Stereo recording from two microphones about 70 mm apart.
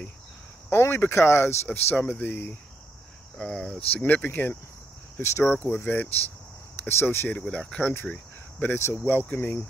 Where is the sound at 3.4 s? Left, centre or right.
Centre.